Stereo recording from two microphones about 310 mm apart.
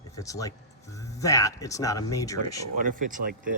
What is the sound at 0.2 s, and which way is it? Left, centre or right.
Speech, centre.